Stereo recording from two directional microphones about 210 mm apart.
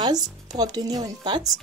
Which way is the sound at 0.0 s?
20° right (ahead or behind).